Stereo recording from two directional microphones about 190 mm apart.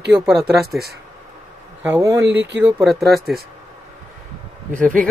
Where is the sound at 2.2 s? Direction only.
70° right (ahead or behind).